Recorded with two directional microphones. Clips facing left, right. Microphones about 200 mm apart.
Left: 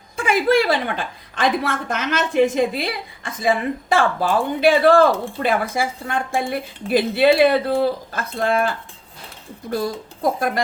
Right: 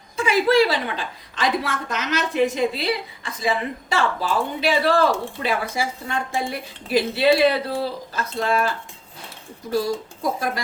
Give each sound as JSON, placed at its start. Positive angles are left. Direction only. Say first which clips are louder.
{"t": 0.2, "sound": "a woman's voice", "louder": "even", "side_deg": 50}